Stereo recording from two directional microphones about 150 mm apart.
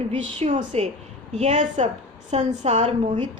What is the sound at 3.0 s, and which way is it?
Speech, 35° right (ahead or behind).